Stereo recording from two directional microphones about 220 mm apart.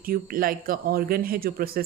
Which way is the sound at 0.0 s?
40° right (ahead or behind).